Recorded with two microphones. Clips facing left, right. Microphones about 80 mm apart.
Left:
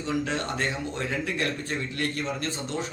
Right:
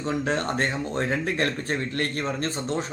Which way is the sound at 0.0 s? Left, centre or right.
Right.